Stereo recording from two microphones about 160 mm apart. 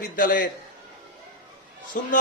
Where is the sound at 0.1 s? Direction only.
60° left (ahead or behind).